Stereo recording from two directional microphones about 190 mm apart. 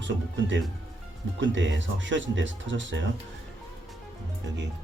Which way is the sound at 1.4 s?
75° right (ahead or behind).